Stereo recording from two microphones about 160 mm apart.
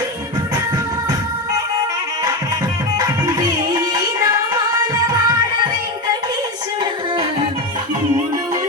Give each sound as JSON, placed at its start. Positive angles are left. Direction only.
{"t": 3.0, "sound": "music", "side_deg": -25}